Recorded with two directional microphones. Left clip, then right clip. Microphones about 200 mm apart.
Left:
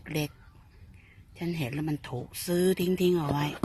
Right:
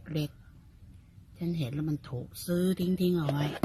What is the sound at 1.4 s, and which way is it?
Speech, 15° left (ahead or behind).